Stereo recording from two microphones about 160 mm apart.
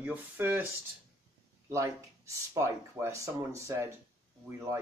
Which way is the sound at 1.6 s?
20° right (ahead or behind).